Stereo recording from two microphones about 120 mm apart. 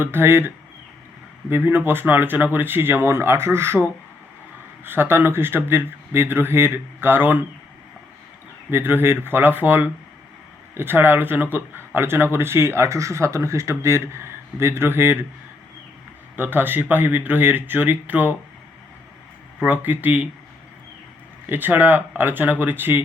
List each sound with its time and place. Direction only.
0.0 s speech: 20° right (ahead or behind)
4.9 s speech: 20° right (ahead or behind)
8.7 s speech: 20° right (ahead or behind)
16.3 s speech: 15° right (ahead or behind)
19.6 s speech: 15° right (ahead or behind)
21.5 s speech: 15° right (ahead or behind)